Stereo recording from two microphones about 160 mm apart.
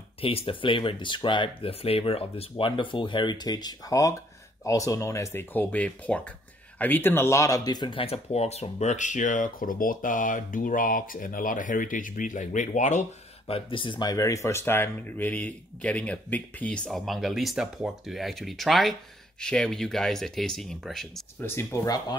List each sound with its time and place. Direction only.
0.2 s speech: 35° left (ahead or behind)
13.5 s speech: 30° left (ahead or behind); by 21.2 s centre (ahead or behind)
21.4 s speech: 15° left (ahead or behind)